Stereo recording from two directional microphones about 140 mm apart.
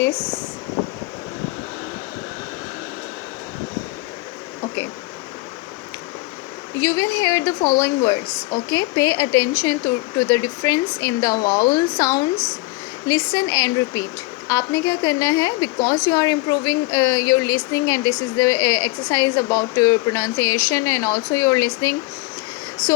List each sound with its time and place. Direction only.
6.7 s a woman's voice: 25° left (ahead or behind)